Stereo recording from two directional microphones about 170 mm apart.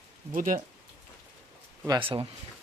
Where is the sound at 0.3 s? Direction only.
50° right (ahead or behind).